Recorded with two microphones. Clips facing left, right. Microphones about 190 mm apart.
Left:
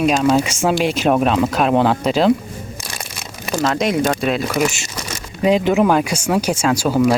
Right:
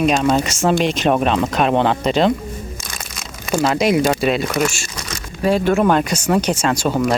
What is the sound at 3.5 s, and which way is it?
Speech, 10° right (ahead or behind).